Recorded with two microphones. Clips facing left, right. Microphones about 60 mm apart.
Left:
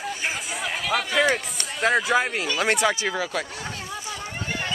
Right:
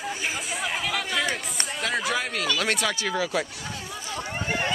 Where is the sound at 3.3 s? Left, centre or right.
Centre.